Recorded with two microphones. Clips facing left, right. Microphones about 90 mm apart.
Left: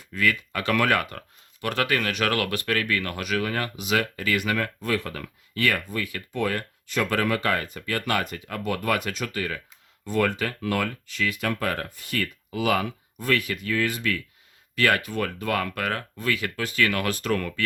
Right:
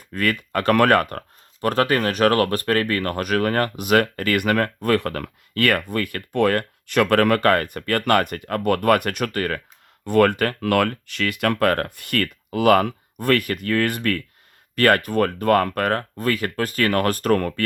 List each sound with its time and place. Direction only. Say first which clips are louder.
0.0 s speech: right 2 dB; 50° right (ahead or behind)